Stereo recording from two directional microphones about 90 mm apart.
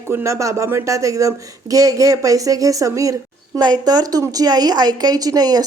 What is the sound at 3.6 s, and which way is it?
A woman's voice, 50° right (ahead or behind).